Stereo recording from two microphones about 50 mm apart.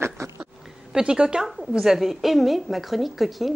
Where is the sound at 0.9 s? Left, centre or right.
Centre.